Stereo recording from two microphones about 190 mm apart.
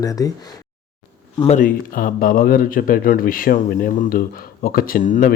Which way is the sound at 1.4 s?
35° left (ahead or behind).